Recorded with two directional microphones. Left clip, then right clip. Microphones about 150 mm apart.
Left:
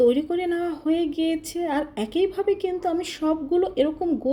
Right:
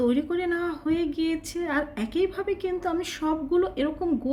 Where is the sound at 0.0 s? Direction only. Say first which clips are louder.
Left 5 dB; 15° left (ahead or behind).